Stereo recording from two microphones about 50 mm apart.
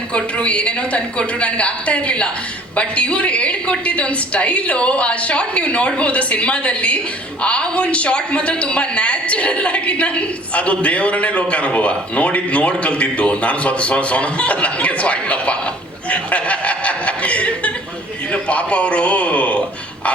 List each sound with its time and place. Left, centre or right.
0.1 s a woman's voice: left
16.0 s chuckle: left
18.3 s a woman's voice: left